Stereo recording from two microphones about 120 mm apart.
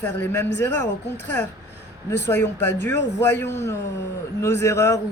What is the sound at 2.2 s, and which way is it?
Speech, 20° left (ahead or behind).